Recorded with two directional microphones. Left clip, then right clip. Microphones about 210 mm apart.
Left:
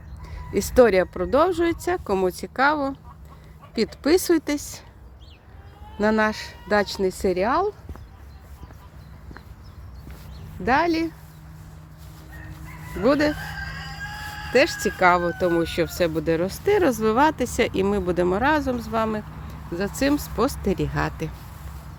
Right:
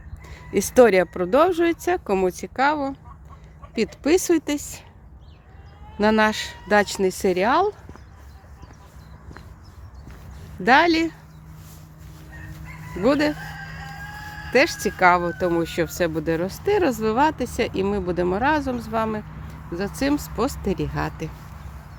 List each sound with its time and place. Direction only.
0.3 s speech: 15° right (ahead or behind)
6.0 s speech: 15° right (ahead or behind)
10.6 s speech: 25° right (ahead or behind)
13.0 s speech: 10° right (ahead or behind)
14.5 s speech: 10° right (ahead or behind)